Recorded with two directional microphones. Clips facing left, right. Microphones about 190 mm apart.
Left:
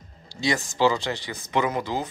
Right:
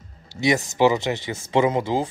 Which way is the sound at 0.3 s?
20° right (ahead or behind).